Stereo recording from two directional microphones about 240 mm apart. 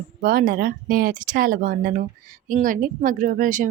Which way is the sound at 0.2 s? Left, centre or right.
Right.